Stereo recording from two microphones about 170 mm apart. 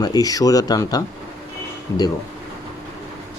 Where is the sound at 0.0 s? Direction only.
20° left (ahead or behind).